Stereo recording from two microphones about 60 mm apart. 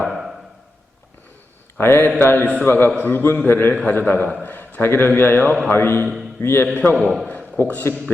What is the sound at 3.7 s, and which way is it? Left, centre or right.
Speech, centre.